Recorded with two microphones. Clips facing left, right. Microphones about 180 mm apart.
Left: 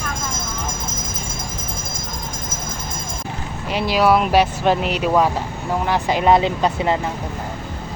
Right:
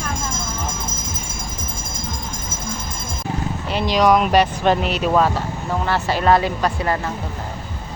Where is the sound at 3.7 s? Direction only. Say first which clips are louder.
Even; 10° left (ahead or behind).